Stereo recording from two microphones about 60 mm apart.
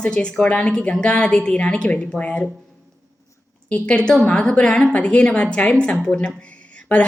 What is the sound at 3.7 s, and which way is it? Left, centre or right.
A woman's voice, centre.